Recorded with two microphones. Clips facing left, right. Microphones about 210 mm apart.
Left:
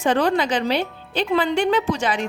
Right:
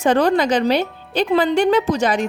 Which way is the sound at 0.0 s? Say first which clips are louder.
Right 4 dB; 40° right (ahead or behind).